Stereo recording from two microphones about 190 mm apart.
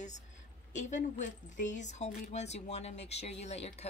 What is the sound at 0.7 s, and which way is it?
Speech, 40° left (ahead or behind).